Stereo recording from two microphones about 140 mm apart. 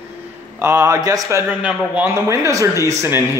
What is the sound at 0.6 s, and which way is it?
Speech, 20° right (ahead or behind).